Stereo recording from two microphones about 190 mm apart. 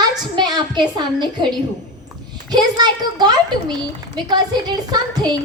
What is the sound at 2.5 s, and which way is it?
A woman's voice, 20° right (ahead or behind).